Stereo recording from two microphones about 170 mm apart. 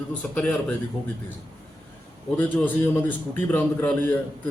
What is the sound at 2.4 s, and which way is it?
A man's voice, 10° left (ahead or behind).